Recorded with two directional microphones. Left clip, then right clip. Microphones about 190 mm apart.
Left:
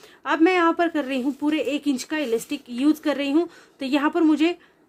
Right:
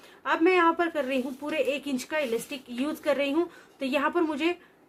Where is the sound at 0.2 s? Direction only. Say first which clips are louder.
Left 3 dB; 50° left (ahead or behind).